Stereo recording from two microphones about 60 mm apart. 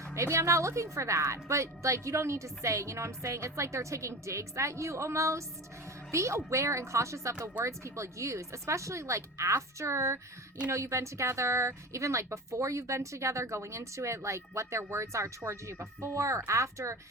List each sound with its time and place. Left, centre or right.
0.2 s a woman's voice: right